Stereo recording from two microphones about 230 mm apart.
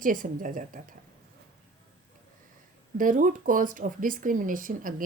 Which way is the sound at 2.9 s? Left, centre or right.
Right.